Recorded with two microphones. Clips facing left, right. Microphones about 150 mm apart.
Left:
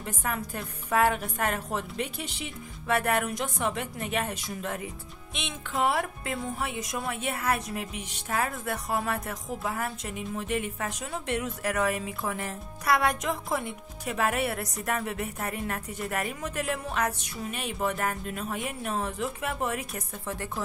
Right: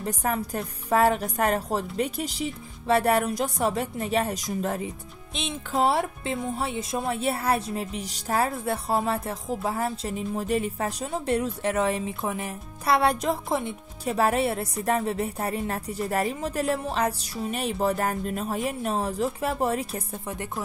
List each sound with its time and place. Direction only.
0.0 s speech: 35° right (ahead or behind); by 12.5 s 20° right (ahead or behind)
12.8 s speech: 30° right (ahead or behind)